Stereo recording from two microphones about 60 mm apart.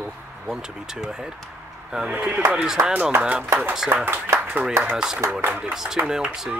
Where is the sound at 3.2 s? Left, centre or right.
Right.